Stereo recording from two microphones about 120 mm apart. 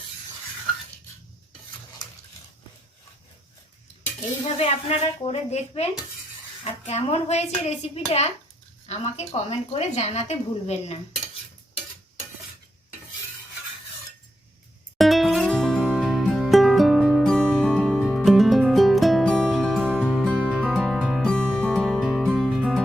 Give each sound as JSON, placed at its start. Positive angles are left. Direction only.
{"t": 4.4, "sound": "a woman's voice", "side_deg": 60}
{"t": 14.9, "sound": "music", "side_deg": 0}
{"t": 15.8, "sound": "music", "side_deg": -10}
{"t": 20.7, "sound": "music", "side_deg": 5}